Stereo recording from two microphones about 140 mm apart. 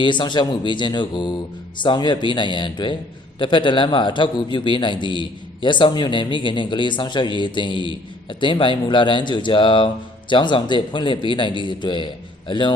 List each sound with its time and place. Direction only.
0.0 s a man's voice: 35° left (ahead or behind)